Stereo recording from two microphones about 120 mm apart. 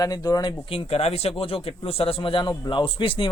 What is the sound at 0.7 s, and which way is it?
Speech, 55° left (ahead or behind).